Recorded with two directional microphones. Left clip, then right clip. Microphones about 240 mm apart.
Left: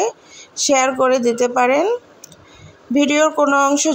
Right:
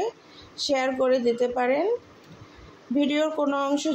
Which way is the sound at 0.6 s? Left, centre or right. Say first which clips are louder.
Left 9 dB; centre.